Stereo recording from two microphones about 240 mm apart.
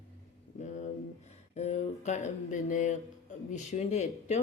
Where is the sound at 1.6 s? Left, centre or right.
Left.